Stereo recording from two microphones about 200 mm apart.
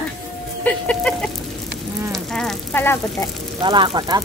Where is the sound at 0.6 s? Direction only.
5° left (ahead or behind).